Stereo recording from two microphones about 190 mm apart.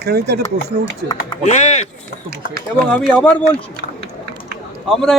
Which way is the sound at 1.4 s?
40° left (ahead or behind).